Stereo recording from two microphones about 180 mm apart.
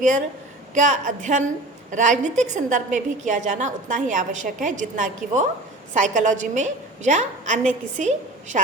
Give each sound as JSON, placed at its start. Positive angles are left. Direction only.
{"t": 0.7, "sound": "a woman's voice", "side_deg": -45}